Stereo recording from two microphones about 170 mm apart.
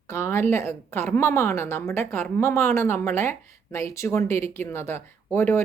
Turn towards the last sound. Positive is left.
turn(degrees=10)  # may be behind; listen again after turning